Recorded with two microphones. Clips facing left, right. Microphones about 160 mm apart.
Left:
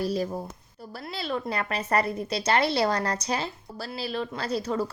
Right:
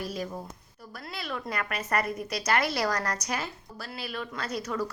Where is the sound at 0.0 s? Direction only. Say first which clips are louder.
Left 6 dB; 35° left (ahead or behind).